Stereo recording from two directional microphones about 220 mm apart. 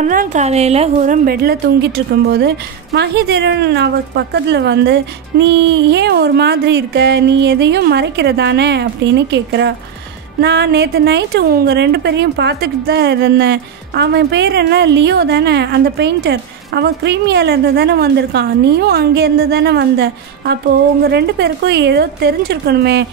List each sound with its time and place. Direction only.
0.0 s a woman's voice: 35° right (ahead or behind)